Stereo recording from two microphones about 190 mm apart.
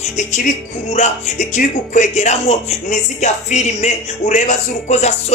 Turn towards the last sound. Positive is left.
turn(degrees=35)  # may be behind; listen again after turning